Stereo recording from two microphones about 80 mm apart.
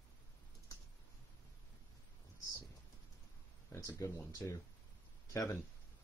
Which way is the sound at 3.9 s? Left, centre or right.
Left.